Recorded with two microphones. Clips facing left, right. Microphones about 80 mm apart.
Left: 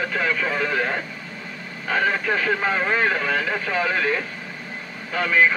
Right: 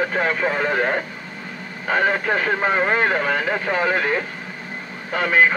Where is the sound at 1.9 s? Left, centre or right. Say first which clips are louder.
Right 2 dB; right.